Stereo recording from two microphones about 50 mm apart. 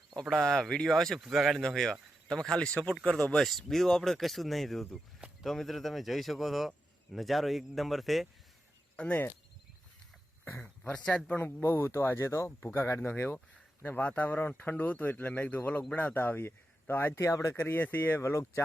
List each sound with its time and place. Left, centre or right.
0.3 s speech: centre
1.2 s speech: centre
1.6 s speech: centre
3.3 s speech: centre
10.9 s speech: left
11.3 s speech: left
11.6 s speech: left
13.8 s speech: left
16.1 s speech: left
17.2 s speech: left
17.6 s speech: left
18.2 s speech: left